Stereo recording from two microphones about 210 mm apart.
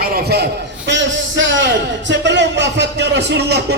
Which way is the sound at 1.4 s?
60° right (ahead or behind).